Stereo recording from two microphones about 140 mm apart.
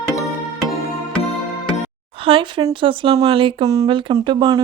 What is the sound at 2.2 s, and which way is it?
Speech, 40° right (ahead or behind).